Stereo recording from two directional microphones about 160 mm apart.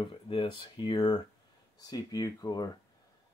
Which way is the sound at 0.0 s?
30° left (ahead or behind).